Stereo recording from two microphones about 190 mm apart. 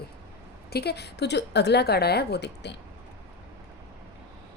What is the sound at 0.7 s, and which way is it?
Speech, 60° left (ahead or behind).